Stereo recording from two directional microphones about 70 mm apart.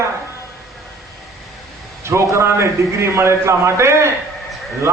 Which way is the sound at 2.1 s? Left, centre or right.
Right.